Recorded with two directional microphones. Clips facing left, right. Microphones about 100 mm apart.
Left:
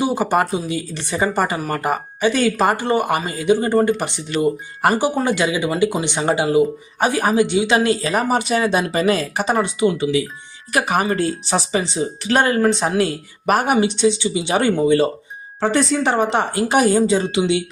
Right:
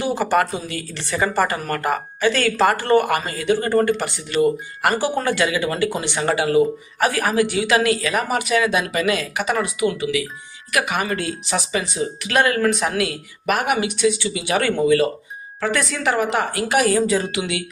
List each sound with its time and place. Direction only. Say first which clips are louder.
0.0 s speech: left 1 dB; 15° left (ahead or behind)